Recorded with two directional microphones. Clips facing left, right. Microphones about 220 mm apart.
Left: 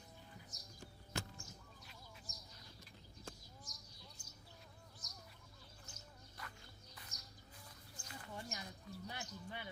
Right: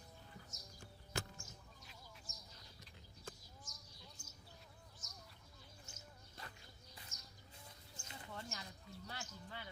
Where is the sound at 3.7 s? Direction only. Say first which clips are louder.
Left 1 dB; 35° left (ahead or behind).